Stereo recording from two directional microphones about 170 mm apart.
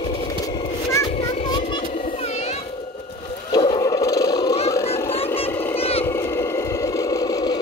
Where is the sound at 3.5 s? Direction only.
25° left (ahead or behind).